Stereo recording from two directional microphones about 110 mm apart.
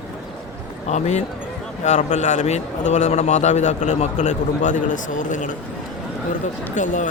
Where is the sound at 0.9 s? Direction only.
90° left.